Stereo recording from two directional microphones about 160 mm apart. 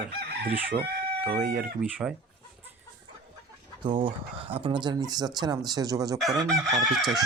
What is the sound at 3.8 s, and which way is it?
Speech, 30° right (ahead or behind).